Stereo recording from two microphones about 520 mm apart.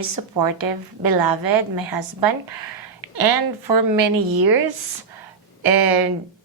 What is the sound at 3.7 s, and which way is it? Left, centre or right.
Speech, right.